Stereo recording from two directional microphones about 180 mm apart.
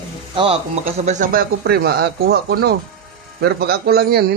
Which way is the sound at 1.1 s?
45° right (ahead or behind).